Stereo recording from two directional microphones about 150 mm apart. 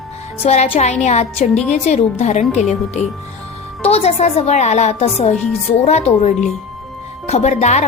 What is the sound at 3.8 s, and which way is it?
A woman's voice, 45° left (ahead or behind).